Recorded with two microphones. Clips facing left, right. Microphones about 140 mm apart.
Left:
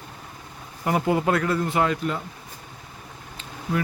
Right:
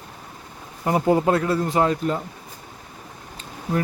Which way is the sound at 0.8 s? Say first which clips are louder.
Right 3 dB; 25° right (ahead or behind).